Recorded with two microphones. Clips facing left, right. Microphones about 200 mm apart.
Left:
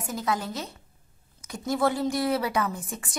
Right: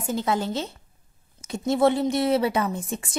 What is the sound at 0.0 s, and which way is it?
A woman's voice, 25° right (ahead or behind).